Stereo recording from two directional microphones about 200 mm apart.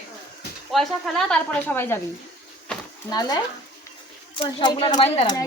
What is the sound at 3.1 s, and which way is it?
A woman's voice, 20° left (ahead or behind).